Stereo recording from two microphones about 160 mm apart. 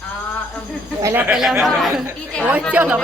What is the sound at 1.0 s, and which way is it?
A woman's voice, 15° right (ahead or behind).